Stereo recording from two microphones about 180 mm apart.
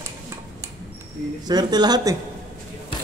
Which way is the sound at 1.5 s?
20° right (ahead or behind).